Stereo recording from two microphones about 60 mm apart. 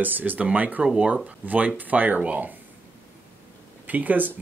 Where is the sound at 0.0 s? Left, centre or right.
Right.